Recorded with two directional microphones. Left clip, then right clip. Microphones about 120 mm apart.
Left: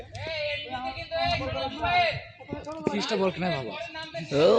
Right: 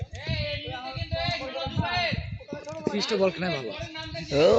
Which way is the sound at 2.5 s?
10° right (ahead or behind).